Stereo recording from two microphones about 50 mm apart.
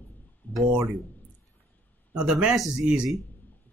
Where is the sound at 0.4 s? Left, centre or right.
Left.